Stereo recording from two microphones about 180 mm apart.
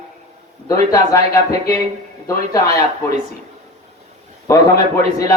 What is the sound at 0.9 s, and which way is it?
Speech, 15° left (ahead or behind).